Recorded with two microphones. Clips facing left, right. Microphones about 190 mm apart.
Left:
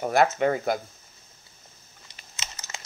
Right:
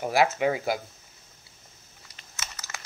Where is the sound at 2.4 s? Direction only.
20° left (ahead or behind).